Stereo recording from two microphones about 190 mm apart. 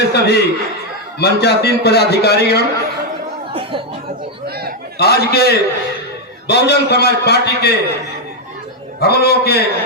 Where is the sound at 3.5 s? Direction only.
30° right (ahead or behind).